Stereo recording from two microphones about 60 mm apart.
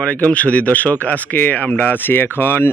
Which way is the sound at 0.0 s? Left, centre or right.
Left.